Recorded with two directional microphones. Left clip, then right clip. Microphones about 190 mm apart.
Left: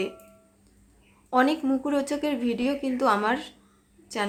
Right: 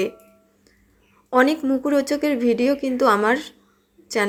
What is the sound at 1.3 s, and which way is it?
A woman's voice, 20° right (ahead or behind).